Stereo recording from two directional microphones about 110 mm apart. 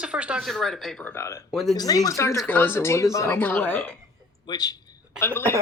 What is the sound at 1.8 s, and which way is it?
Speech, 35° left (ahead or behind).